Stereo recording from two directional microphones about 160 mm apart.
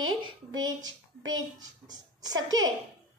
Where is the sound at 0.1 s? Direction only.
25° right (ahead or behind).